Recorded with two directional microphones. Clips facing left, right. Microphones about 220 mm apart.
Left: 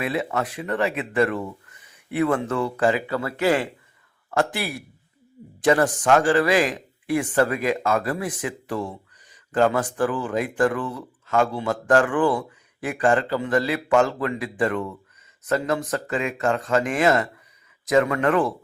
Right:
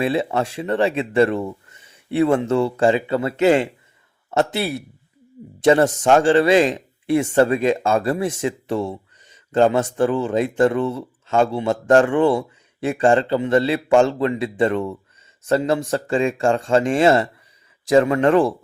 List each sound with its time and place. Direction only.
0.0 s speech: 30° right (ahead or behind)